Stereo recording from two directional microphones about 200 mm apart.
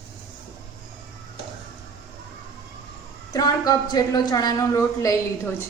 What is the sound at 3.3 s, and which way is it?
A woman's voice, 20° left (ahead or behind).